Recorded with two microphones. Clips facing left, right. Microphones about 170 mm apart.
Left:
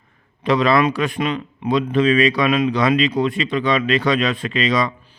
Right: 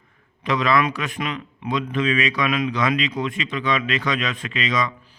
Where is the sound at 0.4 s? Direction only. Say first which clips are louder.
Left 4 dB; 30° left (ahead or behind).